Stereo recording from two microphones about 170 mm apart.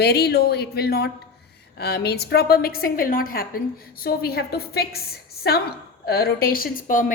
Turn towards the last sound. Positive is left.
turn(degrees=50)  # may be behind; listen again after turning